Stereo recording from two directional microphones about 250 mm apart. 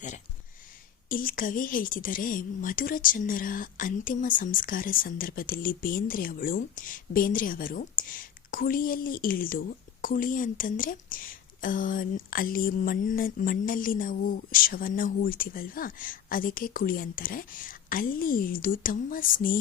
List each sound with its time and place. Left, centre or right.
1.0 s a woman's voice: left